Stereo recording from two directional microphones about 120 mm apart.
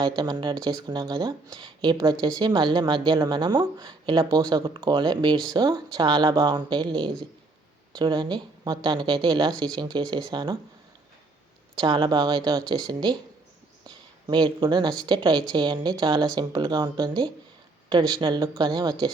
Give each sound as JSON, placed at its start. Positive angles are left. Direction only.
{"t": 0.0, "sound": "speech", "side_deg": -40}
{"t": 11.8, "sound": "a woman's voice", "side_deg": -40}